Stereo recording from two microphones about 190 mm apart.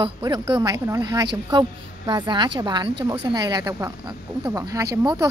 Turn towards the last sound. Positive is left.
turn(degrees=-20)  # may be behind; listen again after turning